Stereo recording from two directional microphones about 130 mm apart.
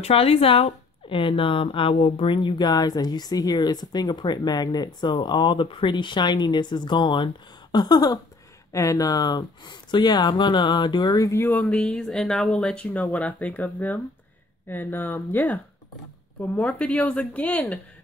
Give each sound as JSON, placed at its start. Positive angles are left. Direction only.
{"t": 0.0, "sound": "speech", "side_deg": 50}
{"t": 11.6, "sound": "speech", "side_deg": 5}